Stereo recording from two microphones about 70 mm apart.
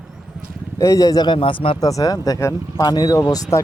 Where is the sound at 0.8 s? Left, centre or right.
Left.